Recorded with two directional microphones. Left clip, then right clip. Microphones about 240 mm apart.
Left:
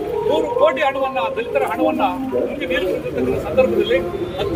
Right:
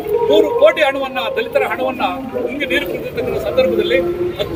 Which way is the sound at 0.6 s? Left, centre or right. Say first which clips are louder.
Right 4 dB; right.